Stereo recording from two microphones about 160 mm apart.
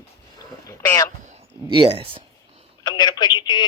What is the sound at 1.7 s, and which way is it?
Speech, 35° right (ahead or behind).